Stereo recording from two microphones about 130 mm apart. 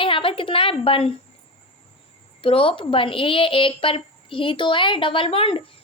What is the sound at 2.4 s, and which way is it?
A woman's voice, 45° left (ahead or behind).